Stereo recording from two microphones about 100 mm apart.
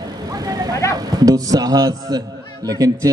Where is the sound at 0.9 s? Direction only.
40° right (ahead or behind).